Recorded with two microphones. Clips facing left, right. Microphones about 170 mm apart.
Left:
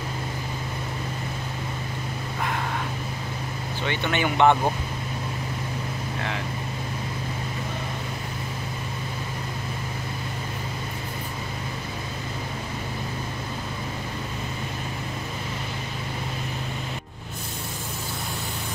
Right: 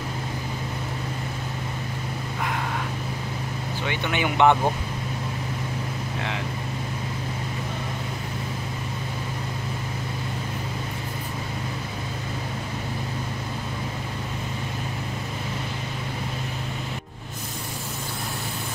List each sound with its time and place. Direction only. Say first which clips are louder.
3.8 s speech: left 1 dB; 10° right (ahead or behind)